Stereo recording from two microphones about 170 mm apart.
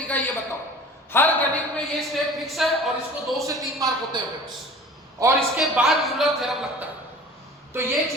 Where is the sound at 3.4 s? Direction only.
20° right (ahead or behind).